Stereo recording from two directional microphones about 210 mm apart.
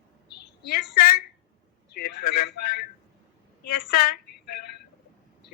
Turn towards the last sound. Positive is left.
turn(degrees=45)  # may be behind; listen again after turning